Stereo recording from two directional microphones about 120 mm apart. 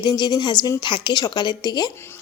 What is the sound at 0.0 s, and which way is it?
A woman's voice, 35° left (ahead or behind).